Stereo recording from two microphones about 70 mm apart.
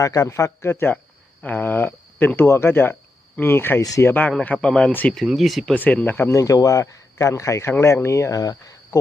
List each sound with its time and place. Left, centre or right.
0.0 s speech: left
3.8 s speech: left
4.0 s speech: left
4.4 s speech: centre
4.9 s speech: left
5.1 s speech: centre
5.7 s speech: left
6.3 s speech: left
7.7 s speech: left